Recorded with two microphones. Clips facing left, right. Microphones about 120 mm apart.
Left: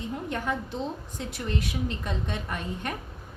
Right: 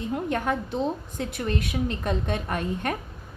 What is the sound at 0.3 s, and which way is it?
A woman's voice, 60° right (ahead or behind).